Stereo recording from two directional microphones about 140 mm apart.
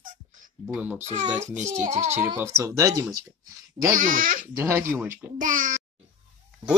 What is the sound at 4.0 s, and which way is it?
Speech, 80° right.